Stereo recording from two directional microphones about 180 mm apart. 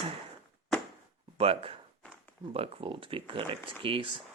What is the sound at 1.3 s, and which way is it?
Speech, 30° right (ahead or behind).